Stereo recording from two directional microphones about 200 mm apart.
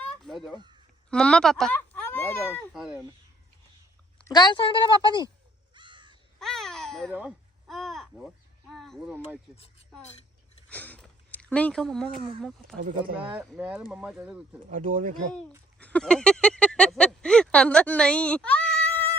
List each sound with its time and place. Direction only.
0.0 s a sound: centre (ahead or behind)
1.1 s speech: 5° left (ahead or behind)
2.7 s speech: 5° right (ahead or behind)
4.3 s a woman's voice: 20° left (ahead or behind)
5.7 s crow: 25° right (ahead or behind)
6.4 s babbling: centre (ahead or behind)
7.1 s a sound: 5° right (ahead or behind)
8.7 s speech: centre (ahead or behind)
10.7 s a sound: 10° left (ahead or behind)
13.2 s speech: 5° right (ahead or behind)
14.7 s speech: 40° right (ahead or behind)
15.8 s speech: 5° left (ahead or behind)